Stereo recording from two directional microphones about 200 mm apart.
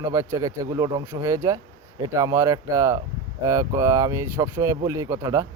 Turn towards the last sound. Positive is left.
turn(degrees=-15)  # may be behind; listen again after turning